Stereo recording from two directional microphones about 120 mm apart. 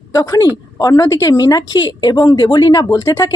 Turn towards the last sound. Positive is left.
turn(degrees=30)  # may be behind; listen again after turning